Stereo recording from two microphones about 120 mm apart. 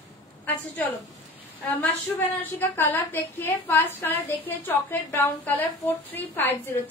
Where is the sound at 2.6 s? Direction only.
20° left (ahead or behind).